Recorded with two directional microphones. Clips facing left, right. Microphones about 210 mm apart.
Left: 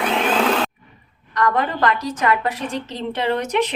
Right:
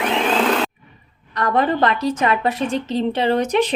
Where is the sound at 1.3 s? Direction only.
30° right (ahead or behind).